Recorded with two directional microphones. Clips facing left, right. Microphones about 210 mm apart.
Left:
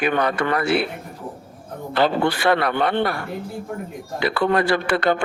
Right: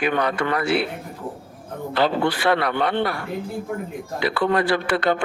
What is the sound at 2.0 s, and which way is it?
A man's voice, 50° left (ahead or behind).